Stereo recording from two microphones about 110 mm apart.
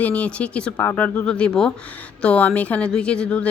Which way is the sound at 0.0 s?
10° left (ahead or behind).